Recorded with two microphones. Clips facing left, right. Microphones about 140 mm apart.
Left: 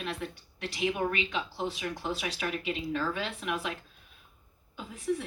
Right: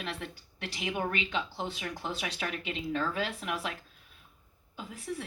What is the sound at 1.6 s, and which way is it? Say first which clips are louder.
Speech: left 3 dB; 30° left (ahead or behind).